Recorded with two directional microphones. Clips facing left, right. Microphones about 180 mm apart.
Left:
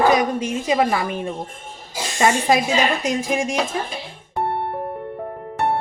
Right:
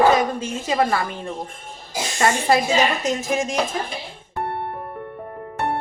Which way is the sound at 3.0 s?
10° left (ahead or behind).